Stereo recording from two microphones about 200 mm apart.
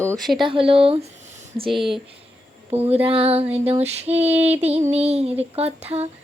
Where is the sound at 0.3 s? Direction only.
25° right (ahead or behind).